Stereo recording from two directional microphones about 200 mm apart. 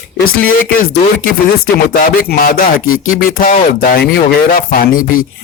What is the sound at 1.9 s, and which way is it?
Speech, 45° left (ahead or behind).